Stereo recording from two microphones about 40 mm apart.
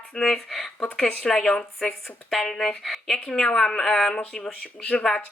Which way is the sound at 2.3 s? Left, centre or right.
Centre.